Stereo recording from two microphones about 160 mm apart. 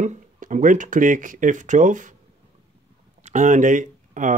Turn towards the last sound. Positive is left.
turn(degrees=-55)  # may be behind; listen again after turning